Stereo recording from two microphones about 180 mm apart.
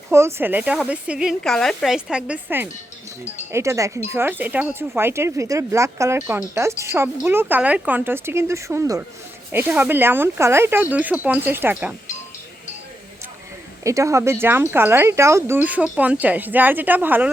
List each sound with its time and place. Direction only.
0.1 s speech: 15° right (ahead or behind)
13.8 s speech: 15° right (ahead or behind)